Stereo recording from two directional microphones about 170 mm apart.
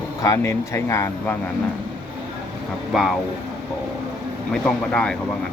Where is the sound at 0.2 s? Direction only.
15° left (ahead or behind).